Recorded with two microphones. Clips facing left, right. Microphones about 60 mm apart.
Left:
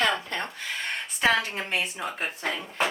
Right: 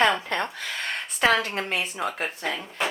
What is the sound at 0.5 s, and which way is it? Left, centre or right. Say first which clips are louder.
Speech: right 1 dB; right.